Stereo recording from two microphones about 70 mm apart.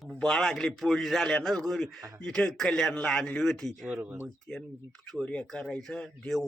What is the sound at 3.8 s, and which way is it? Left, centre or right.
Speech, centre.